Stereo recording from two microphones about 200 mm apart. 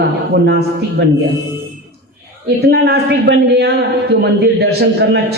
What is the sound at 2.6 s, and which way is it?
A man's voice, 55° right (ahead or behind).